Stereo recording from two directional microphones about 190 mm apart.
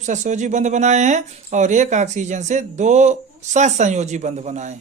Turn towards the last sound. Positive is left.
turn(degrees=-35)  # may be behind; listen again after turning